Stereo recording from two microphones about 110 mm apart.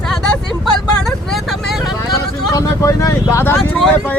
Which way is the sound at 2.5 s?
30° left (ahead or behind).